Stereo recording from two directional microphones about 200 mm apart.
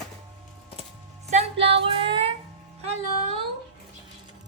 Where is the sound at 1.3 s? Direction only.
30° right (ahead or behind).